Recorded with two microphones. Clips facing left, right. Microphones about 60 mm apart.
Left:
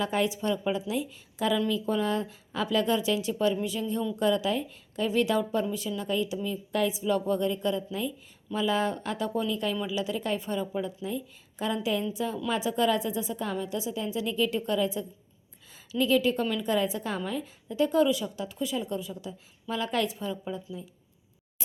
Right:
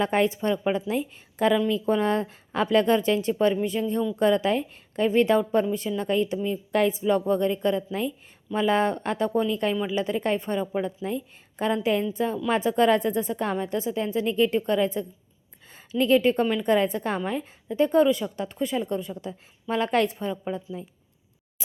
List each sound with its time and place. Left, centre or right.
0.0 s a woman's voice: right